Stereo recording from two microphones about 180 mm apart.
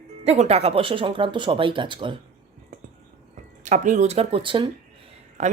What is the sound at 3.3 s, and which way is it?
Speech, 45° right (ahead or behind).